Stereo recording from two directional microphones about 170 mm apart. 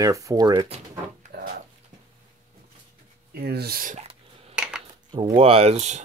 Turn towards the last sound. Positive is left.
turn(degrees=-40)  # may be behind; listen again after turning